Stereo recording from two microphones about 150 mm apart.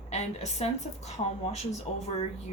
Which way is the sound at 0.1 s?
50° left (ahead or behind).